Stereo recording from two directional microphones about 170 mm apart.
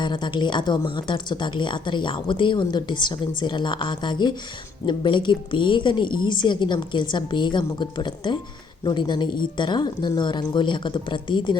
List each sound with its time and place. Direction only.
0.0 s speech: 25° left (ahead or behind)